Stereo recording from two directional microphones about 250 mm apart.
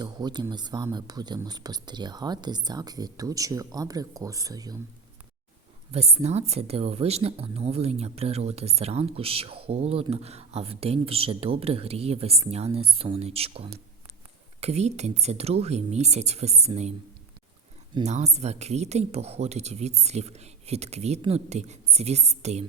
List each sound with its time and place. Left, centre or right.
0.0 s speech: centre
5.9 s speech: right
17.9 s speech: right